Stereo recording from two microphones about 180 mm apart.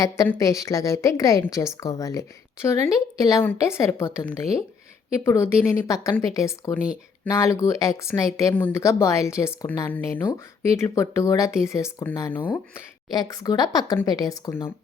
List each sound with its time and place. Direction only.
0.0 s a woman's voice: 15° left (ahead or behind)